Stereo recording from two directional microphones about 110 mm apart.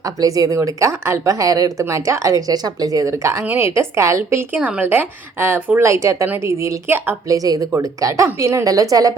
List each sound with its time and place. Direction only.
0.0 s a woman's voice: 35° right (ahead or behind)
7.3 s a woman's voice: 35° right (ahead or behind)